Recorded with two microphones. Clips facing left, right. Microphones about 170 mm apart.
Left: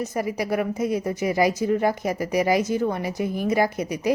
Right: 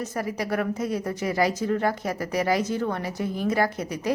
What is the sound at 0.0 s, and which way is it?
A woman's voice, 10° left (ahead or behind).